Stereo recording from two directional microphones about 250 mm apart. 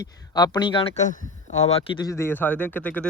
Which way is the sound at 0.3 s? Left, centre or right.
Centre.